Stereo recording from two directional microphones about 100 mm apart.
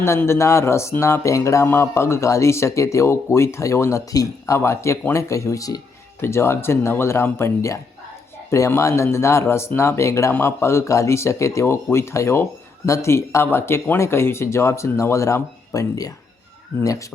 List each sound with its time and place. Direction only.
0.0 s speech: 25° left (ahead or behind)